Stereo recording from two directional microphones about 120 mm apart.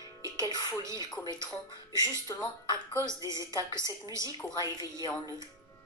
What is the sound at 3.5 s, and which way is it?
Speech, 35° left (ahead or behind).